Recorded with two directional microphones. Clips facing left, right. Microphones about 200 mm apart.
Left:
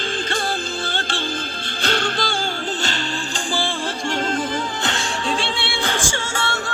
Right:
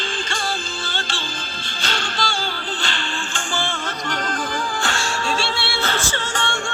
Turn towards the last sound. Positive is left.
turn(degrees=5)  # may be behind; listen again after turning